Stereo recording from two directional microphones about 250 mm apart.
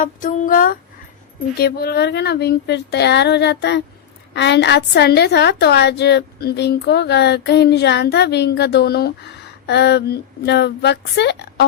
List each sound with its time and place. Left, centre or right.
0.0 s a woman's voice: left